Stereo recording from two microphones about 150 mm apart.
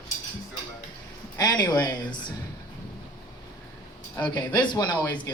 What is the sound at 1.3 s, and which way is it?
Speech, 30° left (ahead or behind).